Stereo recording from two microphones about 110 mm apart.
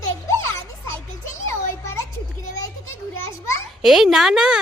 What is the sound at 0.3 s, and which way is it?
Children playing, 25° left (ahead or behind).